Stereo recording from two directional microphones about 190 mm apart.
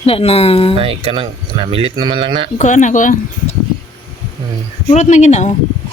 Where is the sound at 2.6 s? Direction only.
40° left (ahead or behind).